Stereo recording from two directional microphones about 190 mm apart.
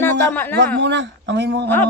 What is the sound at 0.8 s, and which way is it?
Speech, 65° right (ahead or behind).